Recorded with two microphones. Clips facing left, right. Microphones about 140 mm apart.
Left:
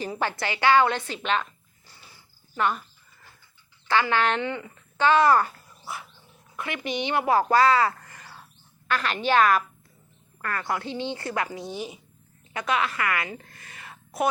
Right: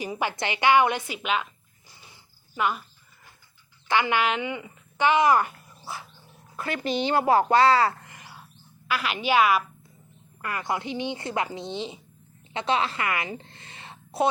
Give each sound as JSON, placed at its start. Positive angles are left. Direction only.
{"t": 0.0, "sound": "speech", "side_deg": -15}
{"t": 2.6, "sound": "speech", "side_deg": -5}
{"t": 3.8, "sound": "speech", "side_deg": -15}
{"t": 5.8, "sound": "wild animals", "side_deg": -30}
{"t": 6.6, "sound": "a woman's voice", "side_deg": -35}